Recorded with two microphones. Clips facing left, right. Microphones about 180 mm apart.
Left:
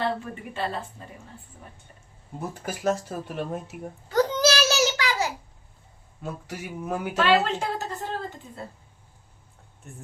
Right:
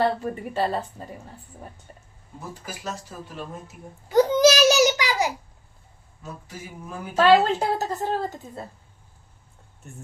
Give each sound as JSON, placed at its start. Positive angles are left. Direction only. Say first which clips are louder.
{"t": 0.0, "sound": "a woman's voice", "louder": "right 5 dB", "side_deg": -40}
{"t": 2.6, "sound": "speech", "louder": "left 10 dB", "side_deg": 55}
{"t": 4.1, "sound": "a sound", "louder": "right 5 dB", "side_deg": -15}
{"t": 6.2, "sound": "a sound", "louder": "left 4 dB", "side_deg": 75}
{"t": 7.2, "sound": "a woman's voice", "louder": "right 5 dB", "side_deg": -40}
{"t": 9.8, "sound": "speech", "louder": "right 1 dB", "side_deg": 0}